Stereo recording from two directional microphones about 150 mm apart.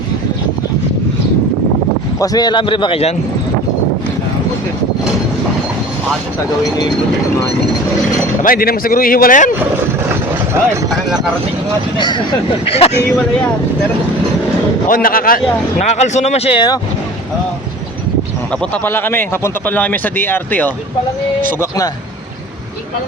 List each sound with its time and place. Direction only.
2.2 s a man's voice: 25° left (ahead or behind)
8.4 s speech: 75° left (ahead or behind)
11.9 s a man's voice: 30° left (ahead or behind)
14.8 s speech: 70° left (ahead or behind)
15.8 s speech: 50° left (ahead or behind); by 16.8 s 30° left (ahead or behind)
18.6 s speech: 15° left (ahead or behind)